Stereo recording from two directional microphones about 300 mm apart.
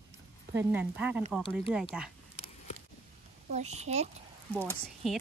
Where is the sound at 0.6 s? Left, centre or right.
Centre.